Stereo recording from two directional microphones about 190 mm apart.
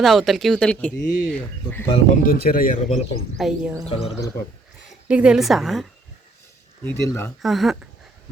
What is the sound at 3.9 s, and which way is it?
Speech, 30° left (ahead or behind).